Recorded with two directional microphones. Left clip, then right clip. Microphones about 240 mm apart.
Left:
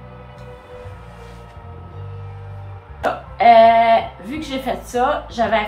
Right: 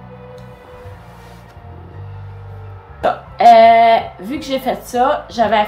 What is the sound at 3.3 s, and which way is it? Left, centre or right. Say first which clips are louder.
Speech: right 3 dB; right.